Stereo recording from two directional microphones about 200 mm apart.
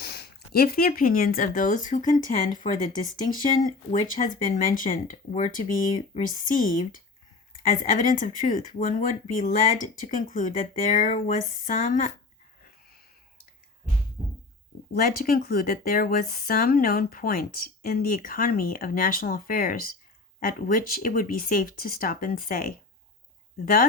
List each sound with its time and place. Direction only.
0.0 s speech: 55° left (ahead or behind)
14.9 s speech: 45° left (ahead or behind)